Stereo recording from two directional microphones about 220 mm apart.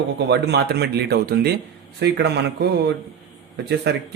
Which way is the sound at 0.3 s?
50° right (ahead or behind).